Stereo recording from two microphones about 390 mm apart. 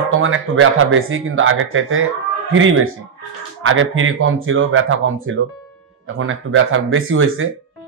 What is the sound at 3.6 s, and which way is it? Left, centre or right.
Speech, right.